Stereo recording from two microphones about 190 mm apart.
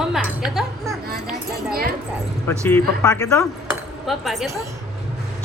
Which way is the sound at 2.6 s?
10° left (ahead or behind).